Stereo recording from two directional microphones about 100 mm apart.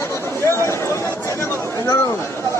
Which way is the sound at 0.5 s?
30° left (ahead or behind).